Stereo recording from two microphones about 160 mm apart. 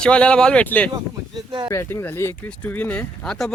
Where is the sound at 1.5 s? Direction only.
30° right (ahead or behind).